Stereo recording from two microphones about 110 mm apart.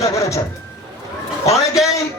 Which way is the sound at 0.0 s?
30° left (ahead or behind).